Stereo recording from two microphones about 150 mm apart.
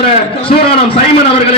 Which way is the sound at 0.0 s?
40° left (ahead or behind).